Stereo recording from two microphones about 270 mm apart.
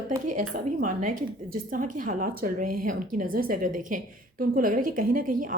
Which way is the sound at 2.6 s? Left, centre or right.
Right.